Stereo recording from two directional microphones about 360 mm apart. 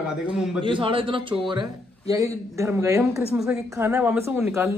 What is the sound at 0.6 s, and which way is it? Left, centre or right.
A woman's voice, centre.